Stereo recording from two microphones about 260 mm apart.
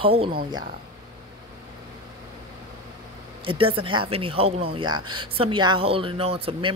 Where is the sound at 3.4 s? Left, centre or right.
Right.